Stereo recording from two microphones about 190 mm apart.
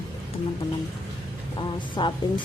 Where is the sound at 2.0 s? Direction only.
25° left (ahead or behind).